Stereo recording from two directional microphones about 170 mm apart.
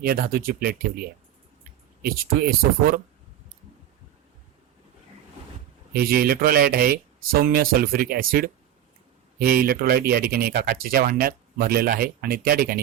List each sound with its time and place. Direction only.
0.0 s speech: 60° right (ahead or behind)
5.9 s speech: 65° right (ahead or behind)